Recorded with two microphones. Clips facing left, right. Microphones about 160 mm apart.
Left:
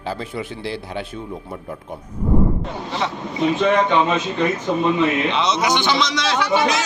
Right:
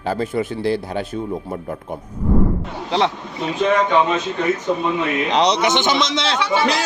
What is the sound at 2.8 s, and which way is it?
Speech, 80° right.